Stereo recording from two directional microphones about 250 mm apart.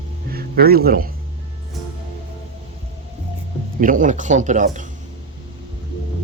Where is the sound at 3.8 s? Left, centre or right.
Right.